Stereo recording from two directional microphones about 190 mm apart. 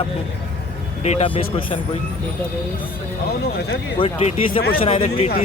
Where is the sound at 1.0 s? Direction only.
35° left (ahead or behind).